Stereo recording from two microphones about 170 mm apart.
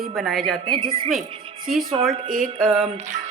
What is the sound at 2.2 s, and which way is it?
Music, 50° right (ahead or behind).